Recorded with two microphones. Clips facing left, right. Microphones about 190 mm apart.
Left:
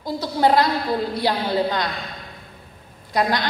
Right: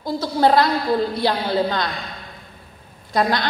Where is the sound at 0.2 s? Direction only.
15° left (ahead or behind).